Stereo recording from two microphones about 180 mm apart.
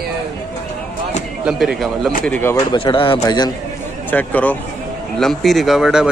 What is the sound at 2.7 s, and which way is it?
Speech, 30° left (ahead or behind).